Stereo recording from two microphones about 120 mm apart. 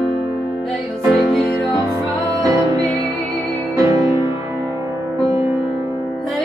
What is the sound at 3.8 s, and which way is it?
Music, 30° right (ahead or behind).